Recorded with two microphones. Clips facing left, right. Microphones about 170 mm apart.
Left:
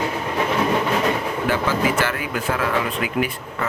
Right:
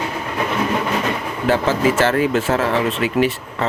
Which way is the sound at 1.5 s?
25° right (ahead or behind).